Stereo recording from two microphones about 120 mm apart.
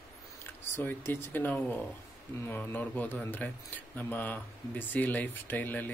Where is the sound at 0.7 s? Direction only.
20° left (ahead or behind).